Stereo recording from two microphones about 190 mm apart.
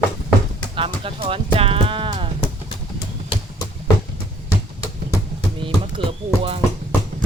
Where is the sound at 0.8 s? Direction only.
30° right (ahead or behind).